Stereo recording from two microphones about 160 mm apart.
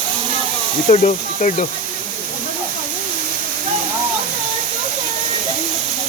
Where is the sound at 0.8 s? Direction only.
50° left (ahead or behind).